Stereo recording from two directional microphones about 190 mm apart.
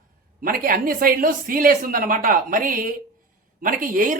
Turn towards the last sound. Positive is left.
turn(degrees=-45)  # may be behind; listen again after turning